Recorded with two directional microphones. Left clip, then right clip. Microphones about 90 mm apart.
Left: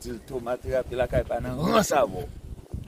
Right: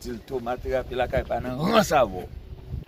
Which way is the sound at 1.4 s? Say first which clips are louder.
Right 4 dB; 70° left (ahead or behind).